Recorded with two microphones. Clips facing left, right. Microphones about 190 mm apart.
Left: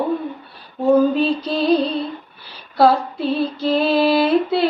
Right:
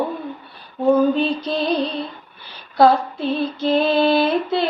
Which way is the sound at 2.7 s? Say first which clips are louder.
Even; 5° left (ahead or behind).